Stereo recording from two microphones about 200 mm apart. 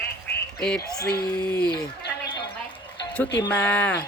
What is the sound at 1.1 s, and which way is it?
Speech, 20° left (ahead or behind).